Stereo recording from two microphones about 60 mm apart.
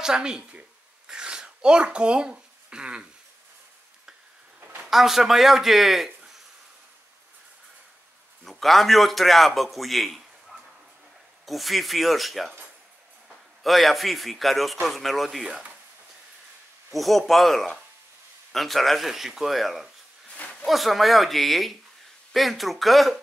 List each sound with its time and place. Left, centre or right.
0.0 s speech: centre
4.8 s a man's voice: centre
8.5 s a man's voice: centre
13.6 s a man's voice: centre
15.4 s speech: centre
16.9 s a man's voice: centre